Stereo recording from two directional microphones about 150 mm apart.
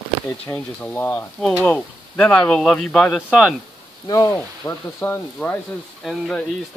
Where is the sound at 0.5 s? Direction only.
10° left (ahead or behind).